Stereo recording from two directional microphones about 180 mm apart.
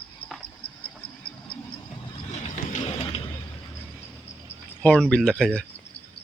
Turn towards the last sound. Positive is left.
turn(degrees=5)  # may be behind; listen again after turning